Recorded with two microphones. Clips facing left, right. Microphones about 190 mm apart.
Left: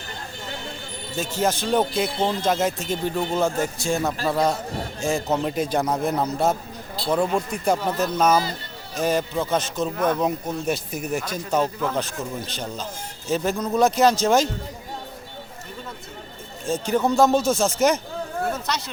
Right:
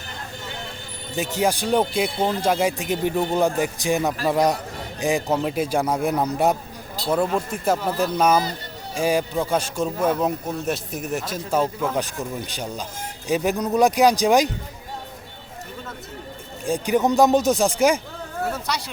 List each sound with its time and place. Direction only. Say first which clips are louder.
1.1 s a man's voice: right 2 dB; 15° right (ahead or behind)
16.6 s a man's voice: right 2 dB; 15° right (ahead or behind)